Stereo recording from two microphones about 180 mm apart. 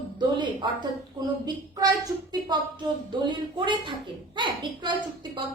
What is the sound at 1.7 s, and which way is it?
A woman's voice, 20° right (ahead or behind).